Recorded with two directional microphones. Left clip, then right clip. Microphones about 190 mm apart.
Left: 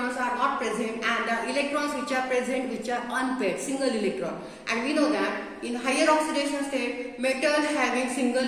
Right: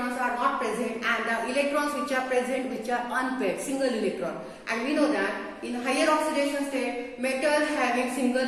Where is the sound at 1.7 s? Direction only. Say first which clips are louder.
Right 1 dB; 10° left (ahead or behind).